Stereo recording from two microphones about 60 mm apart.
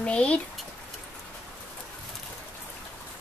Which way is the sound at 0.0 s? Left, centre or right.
Centre.